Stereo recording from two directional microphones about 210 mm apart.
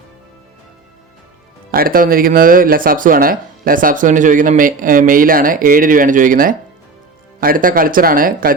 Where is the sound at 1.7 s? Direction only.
45° right (ahead or behind).